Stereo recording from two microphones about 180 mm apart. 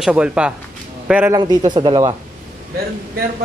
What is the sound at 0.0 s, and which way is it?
Speech, 5° right (ahead or behind).